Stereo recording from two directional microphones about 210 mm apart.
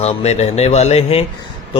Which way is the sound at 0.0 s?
30° left (ahead or behind).